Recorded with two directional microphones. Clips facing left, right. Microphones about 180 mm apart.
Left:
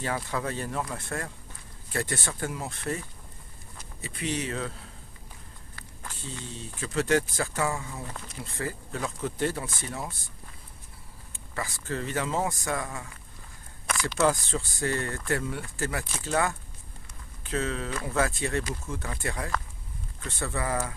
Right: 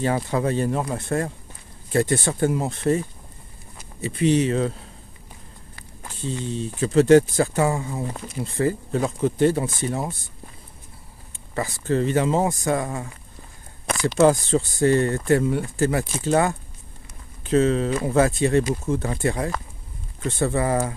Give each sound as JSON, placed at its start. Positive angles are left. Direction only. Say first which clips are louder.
{"t": 0.0, "sound": "speech", "louder": "right 8 dB", "side_deg": -25}
{"t": 5.8, "sound": "speech", "louder": "right 7 dB", "side_deg": -20}
{"t": 11.5, "sound": "speech", "louder": "right 10 dB", "side_deg": -25}